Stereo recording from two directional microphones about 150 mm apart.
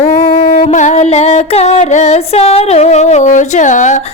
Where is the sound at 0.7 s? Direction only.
50° left (ahead or behind).